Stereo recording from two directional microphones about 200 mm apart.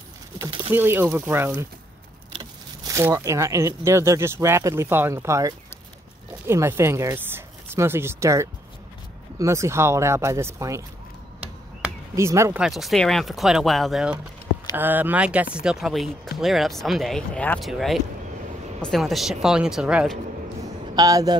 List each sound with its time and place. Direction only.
0.4 s speech: 10° right (ahead or behind)
12.2 s speech: 15° right (ahead or behind)
12.6 s speech: centre (ahead or behind)
20.9 s speech: 20° right (ahead or behind)